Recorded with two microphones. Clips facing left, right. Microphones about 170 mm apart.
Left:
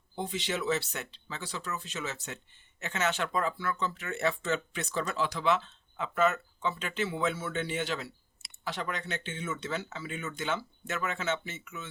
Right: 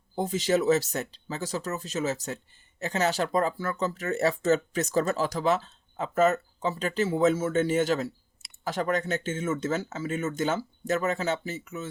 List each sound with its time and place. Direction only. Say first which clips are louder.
0.2 s speech: right 8 dB; 40° right (ahead or behind)